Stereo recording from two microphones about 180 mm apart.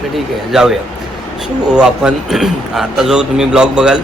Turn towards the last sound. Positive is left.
turn(degrees=-5)  # may be behind; listen again after turning